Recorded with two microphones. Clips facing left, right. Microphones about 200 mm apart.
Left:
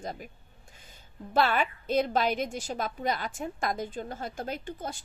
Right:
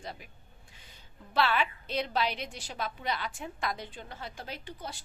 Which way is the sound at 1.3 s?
45° left (ahead or behind).